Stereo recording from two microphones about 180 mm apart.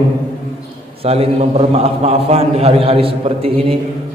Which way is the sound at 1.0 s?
35° right (ahead or behind).